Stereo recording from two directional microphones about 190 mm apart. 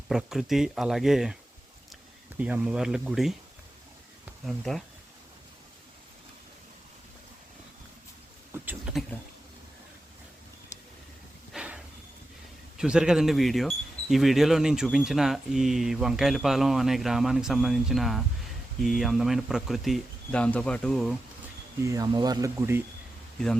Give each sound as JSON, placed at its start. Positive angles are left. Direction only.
{"t": 0.1, "sound": "speech", "side_deg": 0}
{"t": 2.4, "sound": "speech", "side_deg": -5}
{"t": 8.5, "sound": "a sound", "side_deg": -10}
{"t": 11.5, "sound": "a sound", "side_deg": -5}
{"t": 12.7, "sound": "speech", "side_deg": -5}
{"t": 21.8, "sound": "speech", "side_deg": -20}